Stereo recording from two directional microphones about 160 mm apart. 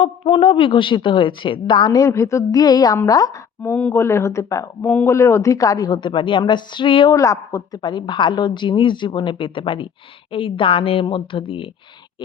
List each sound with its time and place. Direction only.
0.0 s a woman's voice: 35° left (ahead or behind)
3.6 s a woman's voice: 10° left (ahead or behind); by 11.7 s 35° left (ahead or behind)